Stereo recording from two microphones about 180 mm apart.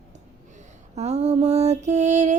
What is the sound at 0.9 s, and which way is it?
Mantra, 35° right (ahead or behind).